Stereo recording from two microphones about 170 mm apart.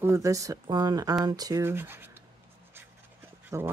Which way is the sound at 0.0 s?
20° right (ahead or behind).